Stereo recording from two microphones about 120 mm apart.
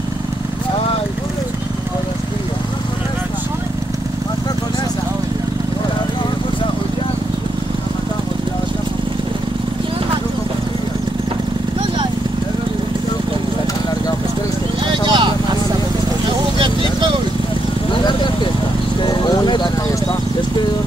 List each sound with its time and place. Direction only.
14.9 s clip-clop: 40° right (ahead or behind)
17.9 s a sound: 40° left (ahead or behind)
19.0 s vehicle: 35° left (ahead or behind)